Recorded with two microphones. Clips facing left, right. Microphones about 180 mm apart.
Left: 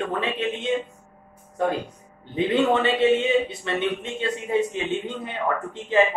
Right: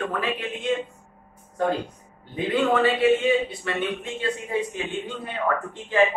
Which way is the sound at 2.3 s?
25° left (ahead or behind).